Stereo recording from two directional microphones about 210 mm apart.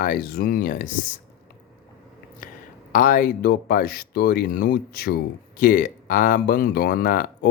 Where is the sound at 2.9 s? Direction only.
40° left (ahead or behind).